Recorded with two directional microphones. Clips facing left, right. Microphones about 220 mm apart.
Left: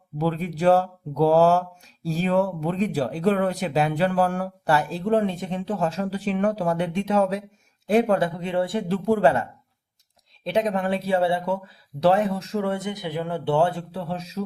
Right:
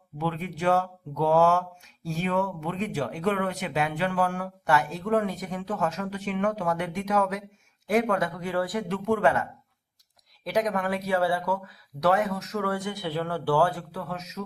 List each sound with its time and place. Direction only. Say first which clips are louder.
0.2 s speech: left 6 dB; 35° left (ahead or behind)